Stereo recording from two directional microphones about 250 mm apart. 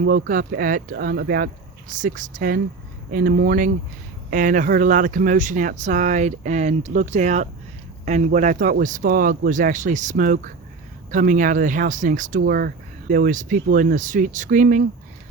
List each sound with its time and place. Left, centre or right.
0.0 s speech: right